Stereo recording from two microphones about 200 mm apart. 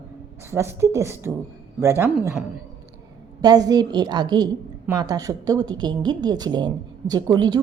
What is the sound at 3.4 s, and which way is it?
A woman's voice, 20° right (ahead or behind).